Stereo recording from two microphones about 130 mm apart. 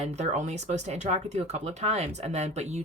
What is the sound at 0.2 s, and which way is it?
Speech, 60° right (ahead or behind).